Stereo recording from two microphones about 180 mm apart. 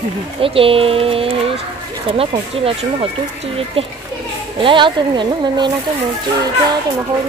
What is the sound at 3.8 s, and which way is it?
A child's voice, 30° right (ahead or behind).